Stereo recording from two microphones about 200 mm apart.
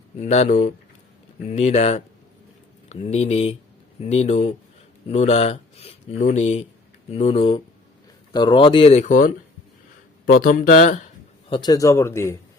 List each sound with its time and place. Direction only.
0.2 s speech: 35° left (ahead or behind)
11.4 s a man's voice: 25° left (ahead or behind)